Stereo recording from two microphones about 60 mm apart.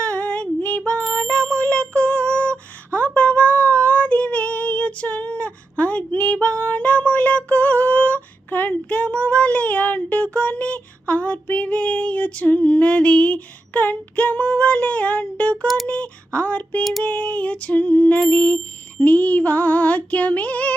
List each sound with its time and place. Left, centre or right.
0.0 s female singing: left
1.2 s music: centre
2.9 s female singing: left
15.6 s a sound: centre
15.9 s music: left